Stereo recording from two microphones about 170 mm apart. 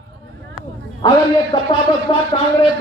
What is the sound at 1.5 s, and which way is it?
Speech, 30° left (ahead or behind).